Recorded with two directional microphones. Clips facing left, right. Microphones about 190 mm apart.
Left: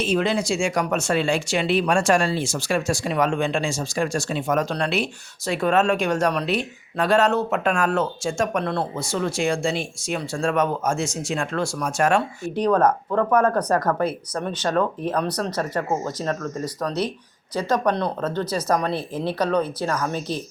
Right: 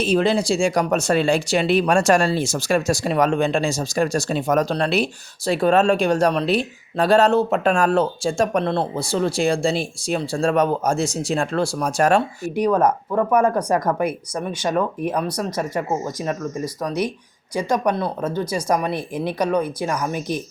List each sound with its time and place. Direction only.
0.0 s speech: 35° right (ahead or behind)
12.5 s speech: 10° right (ahead or behind)